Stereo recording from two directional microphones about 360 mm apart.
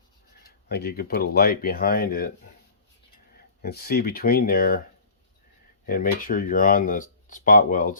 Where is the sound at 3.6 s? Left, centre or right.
Left.